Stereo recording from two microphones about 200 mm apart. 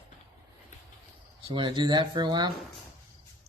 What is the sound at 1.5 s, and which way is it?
Speech, 20° right (ahead or behind).